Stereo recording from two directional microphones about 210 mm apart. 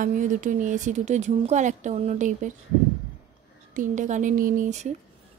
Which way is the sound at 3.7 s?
40° right (ahead or behind).